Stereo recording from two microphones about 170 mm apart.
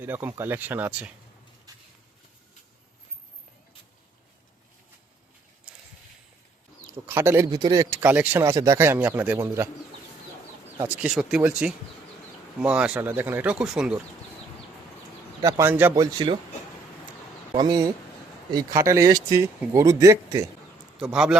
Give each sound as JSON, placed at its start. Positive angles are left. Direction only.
{"t": 0.0, "sound": "a man's voice", "side_deg": -10}
{"t": 5.7, "sound": "a sound", "side_deg": -5}
{"t": 7.1, "sound": "a man's voice", "side_deg": -15}
{"t": 10.8, "sound": "a man's voice", "side_deg": -10}
{"t": 15.4, "sound": "a man's voice", "side_deg": -20}
{"t": 16.1, "sound": "speech", "side_deg": -25}
{"t": 17.5, "sound": "speech", "side_deg": -25}
{"t": 21.0, "sound": "a man's voice", "side_deg": -5}